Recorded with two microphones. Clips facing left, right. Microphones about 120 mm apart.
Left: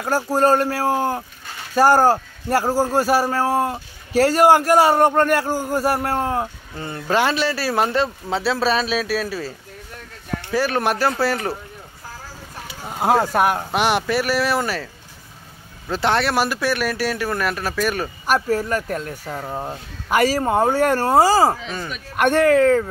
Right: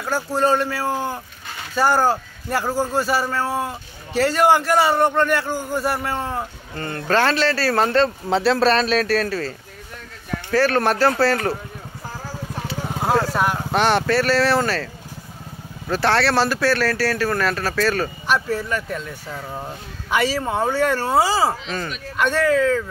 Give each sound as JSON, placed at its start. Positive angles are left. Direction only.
{"t": 0.0, "sound": "speech", "side_deg": 40}
{"t": 1.8, "sound": "a man's voice", "side_deg": 40}
{"t": 6.1, "sound": "speech", "side_deg": 5}
{"t": 10.5, "sound": "speech", "side_deg": 15}
{"t": 13.3, "sound": "speech", "side_deg": 55}
{"t": 13.7, "sound": "speech", "side_deg": 15}
{"t": 15.9, "sound": "speech", "side_deg": 20}
{"t": 18.2, "sound": "speech", "side_deg": 45}
{"t": 19.3, "sound": "speech", "side_deg": 25}
{"t": 20.1, "sound": "speech", "side_deg": 45}
{"t": 21.6, "sound": "speech", "side_deg": 10}
{"t": 22.1, "sound": "speech", "side_deg": 55}